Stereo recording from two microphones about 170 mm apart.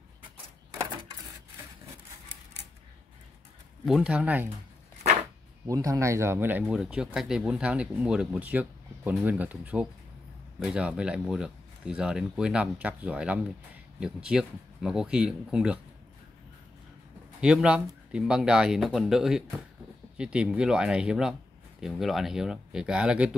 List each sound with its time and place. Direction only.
3.8 s speech: 5° right (ahead or behind)
5.7 s speech: 20° right (ahead or behind)
17.4 s speech: 5° right (ahead or behind)